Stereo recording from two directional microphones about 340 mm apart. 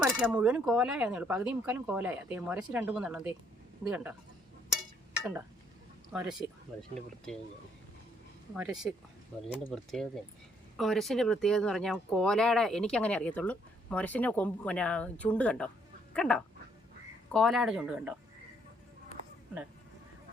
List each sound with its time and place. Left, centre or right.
0.0 s speech: centre
5.2 s speech: centre
8.5 s speech: centre